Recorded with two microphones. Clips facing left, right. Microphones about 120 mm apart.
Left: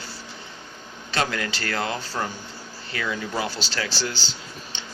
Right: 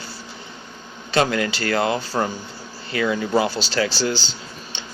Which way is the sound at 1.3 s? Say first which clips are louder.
Right 7 dB; 15° right (ahead or behind).